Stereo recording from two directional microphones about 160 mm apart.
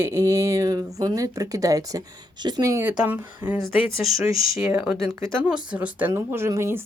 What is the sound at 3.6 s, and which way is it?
Speech, centre (ahead or behind).